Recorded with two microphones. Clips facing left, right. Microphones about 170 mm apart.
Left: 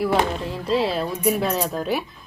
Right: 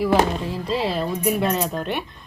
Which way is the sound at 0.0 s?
Centre (ahead or behind).